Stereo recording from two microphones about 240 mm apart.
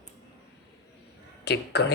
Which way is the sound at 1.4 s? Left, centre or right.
Left.